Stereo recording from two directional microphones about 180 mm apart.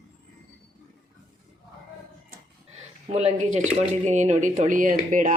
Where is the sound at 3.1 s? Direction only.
40° right (ahead or behind).